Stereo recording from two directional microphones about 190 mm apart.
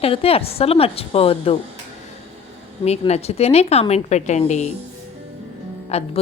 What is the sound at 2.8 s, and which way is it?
A woman's voice, 35° left (ahead or behind).